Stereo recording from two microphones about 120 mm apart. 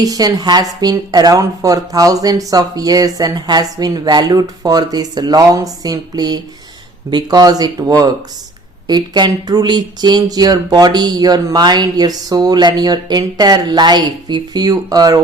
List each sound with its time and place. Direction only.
0.0 s speech: 30° right (ahead or behind)